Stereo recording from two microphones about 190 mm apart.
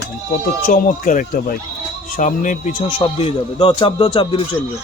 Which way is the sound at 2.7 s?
30° left (ahead or behind).